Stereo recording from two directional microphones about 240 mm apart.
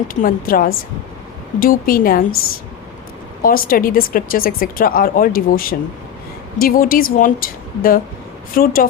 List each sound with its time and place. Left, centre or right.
0.1 s speech: left
3.4 s speech: left